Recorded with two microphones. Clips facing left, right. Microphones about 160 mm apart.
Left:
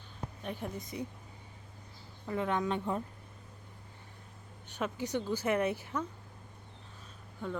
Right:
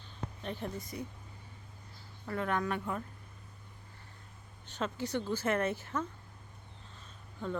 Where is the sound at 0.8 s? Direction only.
20° left (ahead or behind).